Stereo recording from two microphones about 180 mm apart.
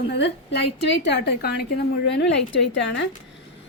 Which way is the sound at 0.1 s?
65° left (ahead or behind).